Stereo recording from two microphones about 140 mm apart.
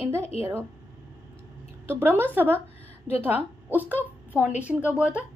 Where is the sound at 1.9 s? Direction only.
15° right (ahead or behind).